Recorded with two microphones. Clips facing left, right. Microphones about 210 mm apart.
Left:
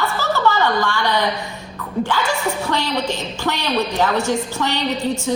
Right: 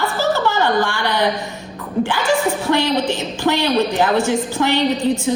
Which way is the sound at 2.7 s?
15° right (ahead or behind).